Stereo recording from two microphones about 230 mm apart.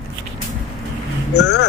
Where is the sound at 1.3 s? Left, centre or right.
Left.